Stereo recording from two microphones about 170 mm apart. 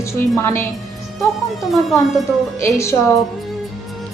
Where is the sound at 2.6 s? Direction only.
15° left (ahead or behind).